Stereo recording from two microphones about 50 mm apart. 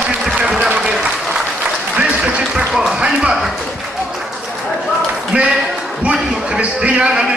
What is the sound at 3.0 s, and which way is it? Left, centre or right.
Speech, centre.